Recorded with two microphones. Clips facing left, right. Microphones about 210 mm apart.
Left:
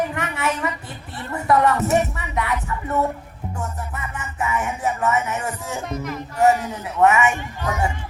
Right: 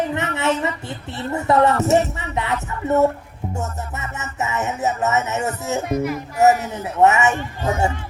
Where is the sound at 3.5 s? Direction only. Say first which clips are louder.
Right 2 dB; 25° right (ahead or behind).